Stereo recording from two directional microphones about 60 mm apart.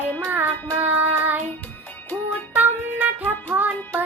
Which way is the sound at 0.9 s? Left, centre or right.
Right.